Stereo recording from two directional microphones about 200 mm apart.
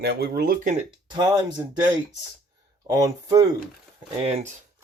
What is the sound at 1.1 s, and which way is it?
Speech, 20° right (ahead or behind).